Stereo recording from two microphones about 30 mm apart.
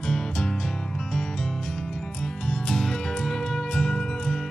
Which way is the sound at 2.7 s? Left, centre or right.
Centre.